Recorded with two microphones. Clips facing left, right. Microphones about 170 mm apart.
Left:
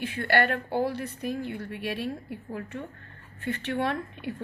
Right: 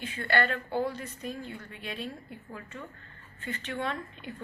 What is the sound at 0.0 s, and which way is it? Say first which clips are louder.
A woman's voice: left 4 dB; 65° left (ahead or behind).